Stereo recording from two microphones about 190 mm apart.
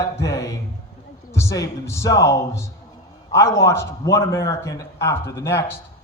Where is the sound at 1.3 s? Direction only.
15° left (ahead or behind).